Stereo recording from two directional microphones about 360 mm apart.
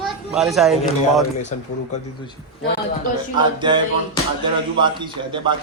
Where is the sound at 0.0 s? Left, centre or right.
Centre.